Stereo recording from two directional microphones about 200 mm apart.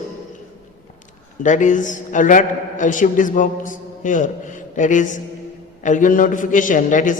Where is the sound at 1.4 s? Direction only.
40° left (ahead or behind).